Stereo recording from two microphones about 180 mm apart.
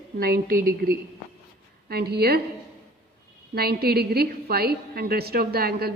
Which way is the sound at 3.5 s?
60° right (ahead or behind).